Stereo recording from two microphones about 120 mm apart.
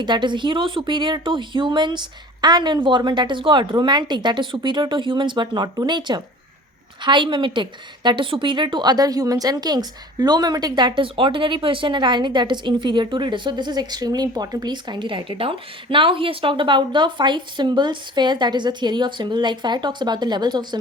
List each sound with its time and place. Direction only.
0.0 s a woman's voice: 40° right (ahead or behind)